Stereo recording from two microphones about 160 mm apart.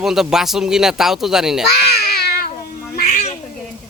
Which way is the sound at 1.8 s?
80° left.